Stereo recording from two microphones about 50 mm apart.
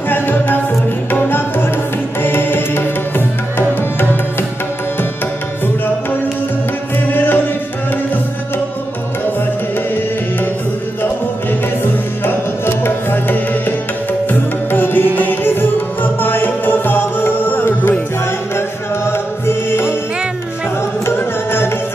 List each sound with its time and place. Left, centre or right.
0.1 s music: left
7.1 s music: left
11.8 s music: left
19.0 s music: left
21.0 s music: left